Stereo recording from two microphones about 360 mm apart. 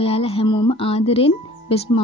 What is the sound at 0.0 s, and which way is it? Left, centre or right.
Speech, centre.